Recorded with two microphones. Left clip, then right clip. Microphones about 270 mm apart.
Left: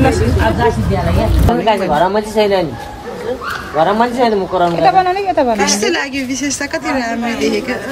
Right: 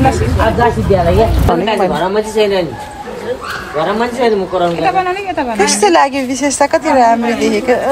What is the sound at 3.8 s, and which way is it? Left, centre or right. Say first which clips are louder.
Speech: left 1 dB; left.